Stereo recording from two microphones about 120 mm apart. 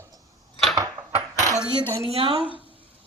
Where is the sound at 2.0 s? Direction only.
55° right (ahead or behind).